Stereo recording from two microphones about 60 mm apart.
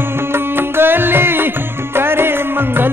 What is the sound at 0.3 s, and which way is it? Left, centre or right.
Music, right.